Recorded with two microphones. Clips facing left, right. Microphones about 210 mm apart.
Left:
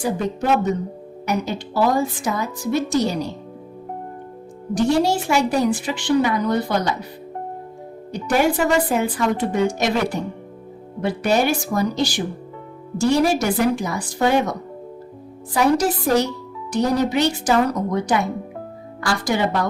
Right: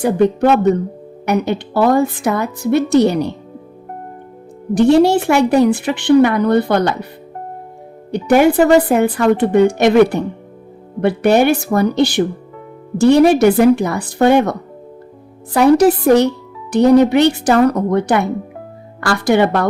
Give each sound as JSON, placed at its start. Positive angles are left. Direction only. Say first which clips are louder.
{"t": 0.0, "sound": "a woman's voice", "louder": "right 9 dB", "side_deg": -60}
{"t": 4.7, "sound": "a woman's voice", "louder": "right 8 dB", "side_deg": -60}
{"t": 8.1, "sound": "a woman's voice", "louder": "right 8 dB", "side_deg": -60}
{"t": 15.5, "sound": "a woman's voice", "louder": "right 8 dB", "side_deg": -60}